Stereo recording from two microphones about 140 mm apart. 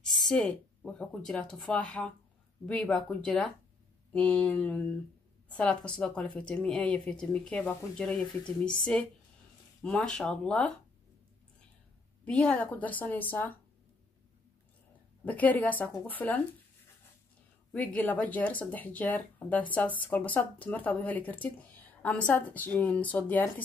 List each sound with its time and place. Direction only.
0.0 s a woman's voice: centre (ahead or behind)
12.3 s a woman's voice: 5° left (ahead or behind)
15.2 s a woman's voice: 10° left (ahead or behind)
17.7 s a woman's voice: 10° left (ahead or behind)